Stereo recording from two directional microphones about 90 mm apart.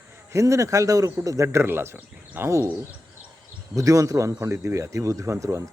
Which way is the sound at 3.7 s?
35° right (ahead or behind).